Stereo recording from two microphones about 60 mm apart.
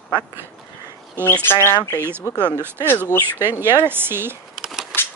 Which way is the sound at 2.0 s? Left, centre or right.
Right.